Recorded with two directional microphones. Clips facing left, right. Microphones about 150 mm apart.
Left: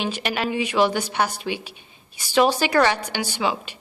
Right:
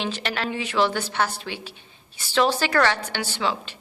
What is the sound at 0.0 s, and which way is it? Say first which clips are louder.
A woman's voice: left 3 dB; 15° left (ahead or behind).